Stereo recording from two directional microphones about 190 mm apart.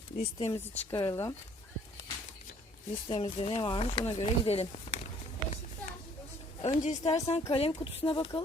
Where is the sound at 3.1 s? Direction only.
30° left (ahead or behind).